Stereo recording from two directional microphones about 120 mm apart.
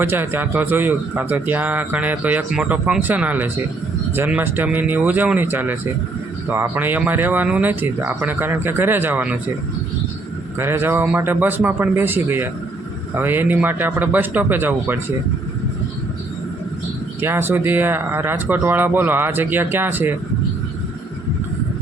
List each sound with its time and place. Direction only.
0.0 s a man's voice: 20° right (ahead or behind)
10.6 s a man's voice: 20° right (ahead or behind)
17.2 s a man's voice: 20° right (ahead or behind)